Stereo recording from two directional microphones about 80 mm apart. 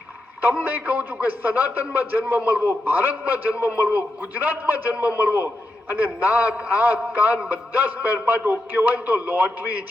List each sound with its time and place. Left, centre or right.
0.4 s a man's voice: right